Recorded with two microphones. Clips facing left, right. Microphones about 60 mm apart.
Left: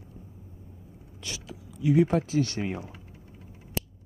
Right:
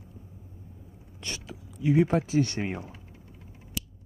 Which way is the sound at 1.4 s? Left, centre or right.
Centre.